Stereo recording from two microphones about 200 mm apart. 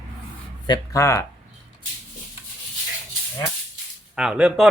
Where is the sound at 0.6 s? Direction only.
15° left (ahead or behind).